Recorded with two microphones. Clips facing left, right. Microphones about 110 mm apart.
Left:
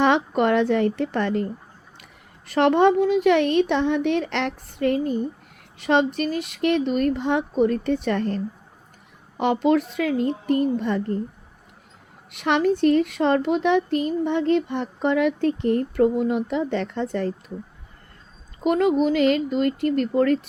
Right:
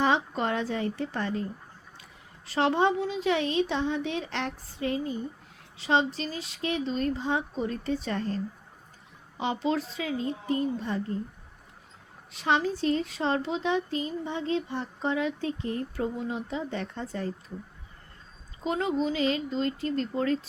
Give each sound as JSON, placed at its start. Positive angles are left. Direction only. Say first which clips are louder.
{"t": 0.0, "sound": "a woman's voice", "louder": "left 7 dB", "side_deg": 65}
{"t": 2.5, "sound": "a woman's voice", "louder": "left 7 dB", "side_deg": 60}
{"t": 9.4, "sound": "a woman's voice", "louder": "left 9 dB", "side_deg": 60}
{"t": 12.3, "sound": "a woman's voice", "louder": "left 6 dB", "side_deg": 65}
{"t": 18.6, "sound": "a woman's voice", "louder": "left 8 dB", "side_deg": 60}